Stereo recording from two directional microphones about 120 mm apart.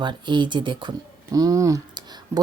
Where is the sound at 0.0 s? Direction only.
40° right (ahead or behind).